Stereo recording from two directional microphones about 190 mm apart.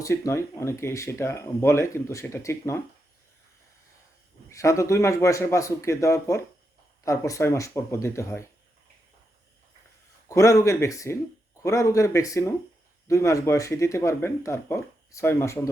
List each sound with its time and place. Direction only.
0.0 s speech: 15° left (ahead or behind)
4.5 s speech: 15° left (ahead or behind)
10.2 s speech: 15° left (ahead or behind)